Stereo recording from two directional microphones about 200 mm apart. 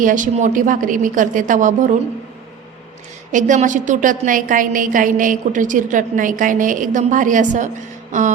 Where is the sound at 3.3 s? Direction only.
40° right (ahead or behind).